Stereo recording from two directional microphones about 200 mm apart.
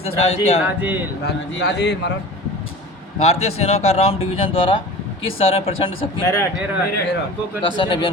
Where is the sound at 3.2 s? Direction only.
30° left (ahead or behind).